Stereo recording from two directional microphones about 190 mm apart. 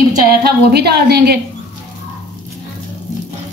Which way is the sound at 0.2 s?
50° right (ahead or behind).